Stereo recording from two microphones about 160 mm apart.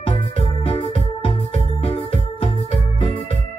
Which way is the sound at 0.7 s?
35° left (ahead or behind).